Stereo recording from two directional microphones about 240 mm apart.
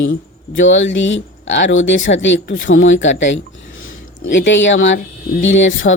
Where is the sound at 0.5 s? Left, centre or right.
Left.